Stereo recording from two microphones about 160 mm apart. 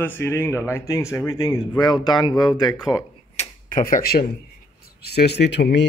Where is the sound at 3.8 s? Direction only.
65° left (ahead or behind).